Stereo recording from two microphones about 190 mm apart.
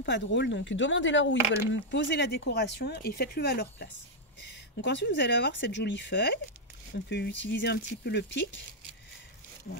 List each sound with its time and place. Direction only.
0.0 s speech: 65° left (ahead or behind)